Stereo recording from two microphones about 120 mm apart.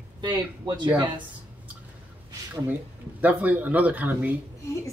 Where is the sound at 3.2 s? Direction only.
15° right (ahead or behind).